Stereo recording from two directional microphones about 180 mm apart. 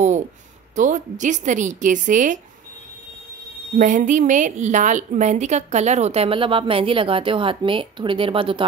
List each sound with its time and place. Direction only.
0.7 s a woman's voice: 45° right (ahead or behind)
3.7 s a woman's voice: 45° right (ahead or behind); by 8.6 s 30° right (ahead or behind)